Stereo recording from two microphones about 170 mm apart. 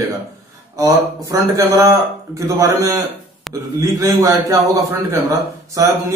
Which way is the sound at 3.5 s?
Centre (ahead or behind).